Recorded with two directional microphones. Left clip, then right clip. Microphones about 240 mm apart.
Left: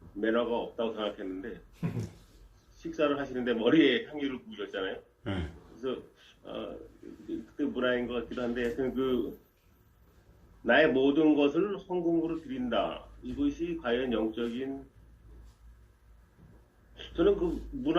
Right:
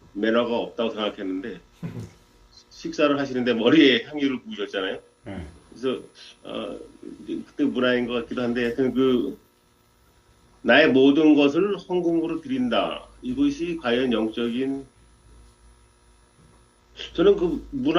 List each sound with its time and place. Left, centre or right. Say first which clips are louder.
0.2 s speech: right 7 dB; right
2.8 s speech: right 8 dB; right
10.6 s speech: right 8 dB; right
16.9 s speech: right 8 dB; right